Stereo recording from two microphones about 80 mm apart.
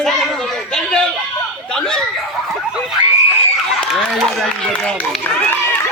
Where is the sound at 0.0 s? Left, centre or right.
Centre.